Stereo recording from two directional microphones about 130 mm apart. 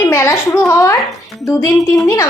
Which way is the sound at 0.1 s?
25° left (ahead or behind).